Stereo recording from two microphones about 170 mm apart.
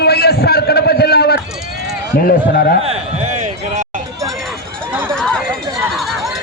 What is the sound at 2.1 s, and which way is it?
Speech, 60° left (ahead or behind).